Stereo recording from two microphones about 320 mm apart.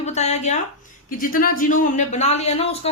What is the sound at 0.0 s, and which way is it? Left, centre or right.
A man's voice, left.